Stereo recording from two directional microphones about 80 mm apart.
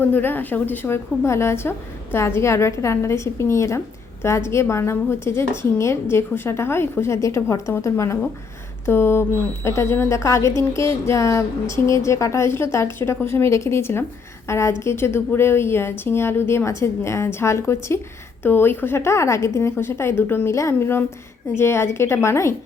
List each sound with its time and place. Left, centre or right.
0.0 s a woman's voice: left